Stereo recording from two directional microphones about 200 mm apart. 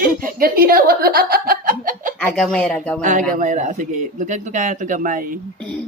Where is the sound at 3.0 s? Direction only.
40° right (ahead or behind).